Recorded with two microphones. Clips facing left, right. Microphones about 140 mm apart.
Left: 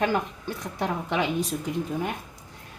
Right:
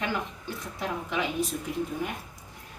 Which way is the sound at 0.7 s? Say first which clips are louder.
Left 4 dB; 70° left (ahead or behind).